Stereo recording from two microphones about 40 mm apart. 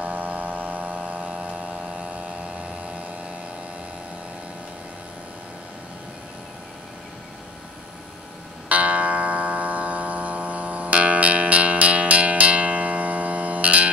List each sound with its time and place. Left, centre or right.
0.0 s a sound: right
2.6 s vehicle: right
8.6 s music: right